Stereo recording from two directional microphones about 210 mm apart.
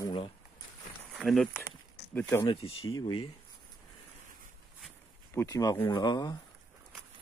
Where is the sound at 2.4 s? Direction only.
25° left (ahead or behind).